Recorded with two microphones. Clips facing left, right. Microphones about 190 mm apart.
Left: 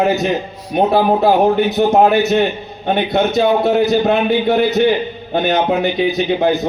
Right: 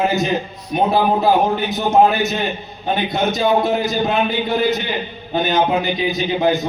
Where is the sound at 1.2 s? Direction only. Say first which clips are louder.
Left 4 dB; 60° left (ahead or behind).